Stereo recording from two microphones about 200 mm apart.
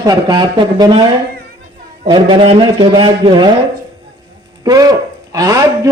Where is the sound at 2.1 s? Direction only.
25° right (ahead or behind).